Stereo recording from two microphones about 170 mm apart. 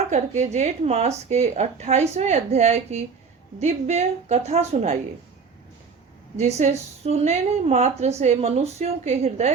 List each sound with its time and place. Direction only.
0.1 s a woman's voice: 40° right (ahead or behind)
6.3 s a woman's voice: 40° right (ahead or behind)